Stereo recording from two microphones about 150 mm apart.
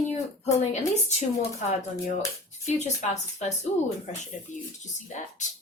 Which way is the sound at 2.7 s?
50° left (ahead or behind).